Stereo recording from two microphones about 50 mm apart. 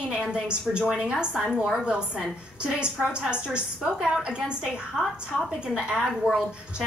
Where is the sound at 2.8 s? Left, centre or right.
Centre.